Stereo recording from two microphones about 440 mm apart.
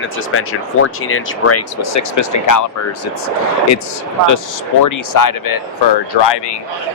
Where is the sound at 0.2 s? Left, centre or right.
Left.